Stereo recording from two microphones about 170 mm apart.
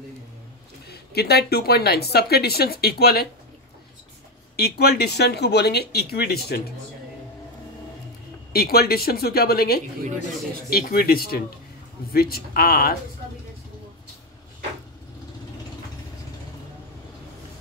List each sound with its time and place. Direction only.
0.8 s speech: 70° left (ahead or behind)
4.6 s speech: 70° left (ahead or behind)
8.5 s speech: 65° left (ahead or behind)